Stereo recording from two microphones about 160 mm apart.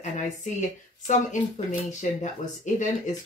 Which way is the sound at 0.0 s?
50° left (ahead or behind).